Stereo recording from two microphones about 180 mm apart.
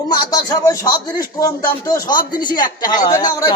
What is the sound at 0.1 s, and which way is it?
Speech, 20° left (ahead or behind).